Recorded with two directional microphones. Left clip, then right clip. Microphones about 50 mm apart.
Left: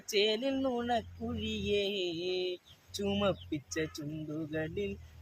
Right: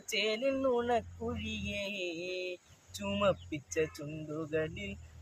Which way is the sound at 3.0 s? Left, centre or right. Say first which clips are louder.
Right 1 dB; right.